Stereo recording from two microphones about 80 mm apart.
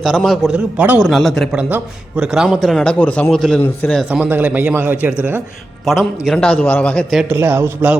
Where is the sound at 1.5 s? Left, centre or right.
Centre.